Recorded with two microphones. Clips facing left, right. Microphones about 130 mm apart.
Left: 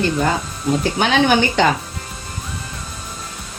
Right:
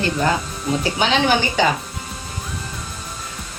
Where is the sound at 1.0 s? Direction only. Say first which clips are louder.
Left 2 dB; 60° left (ahead or behind).